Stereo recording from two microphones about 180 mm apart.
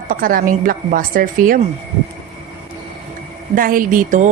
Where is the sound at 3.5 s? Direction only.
50° right (ahead or behind).